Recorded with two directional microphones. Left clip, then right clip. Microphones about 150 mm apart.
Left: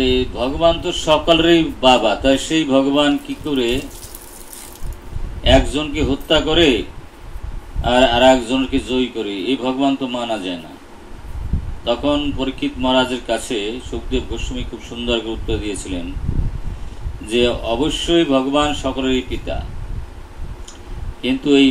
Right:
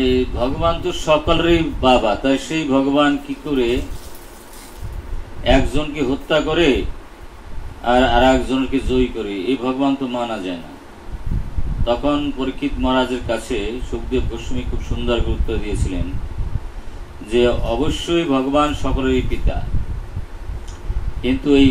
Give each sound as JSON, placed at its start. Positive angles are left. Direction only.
{"t": 0.0, "sound": "a man's voice", "side_deg": 60}
{"t": 5.4, "sound": "a man's voice", "side_deg": 60}
{"t": 7.8, "sound": "a man's voice", "side_deg": 60}
{"t": 11.8, "sound": "a man's voice", "side_deg": 60}
{"t": 17.3, "sound": "a man's voice", "side_deg": 60}
{"t": 21.2, "sound": "a man's voice", "side_deg": 60}